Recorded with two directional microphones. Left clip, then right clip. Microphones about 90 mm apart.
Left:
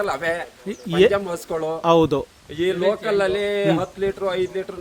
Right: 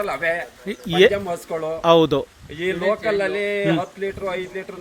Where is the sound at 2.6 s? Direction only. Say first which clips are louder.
Even; 35° left (ahead or behind).